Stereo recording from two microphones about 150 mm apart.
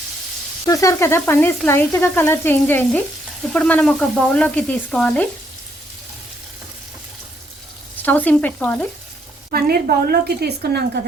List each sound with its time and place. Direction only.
0.6 s frying: 20° left (ahead or behind); by 5.2 s 5° left (ahead or behind)
8.0 s frying: 10° left (ahead or behind)
9.5 s a woman's voice: 85° right